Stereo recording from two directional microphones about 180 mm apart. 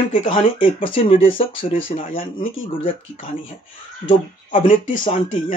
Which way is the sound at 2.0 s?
50° left (ahead or behind).